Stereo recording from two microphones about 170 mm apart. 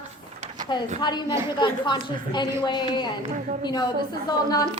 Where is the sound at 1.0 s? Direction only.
25° left (ahead or behind).